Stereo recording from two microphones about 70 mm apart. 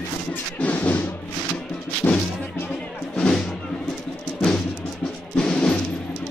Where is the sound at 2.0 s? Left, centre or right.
Left.